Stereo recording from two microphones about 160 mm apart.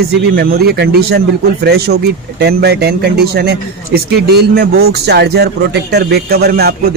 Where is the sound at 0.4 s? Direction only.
85° right.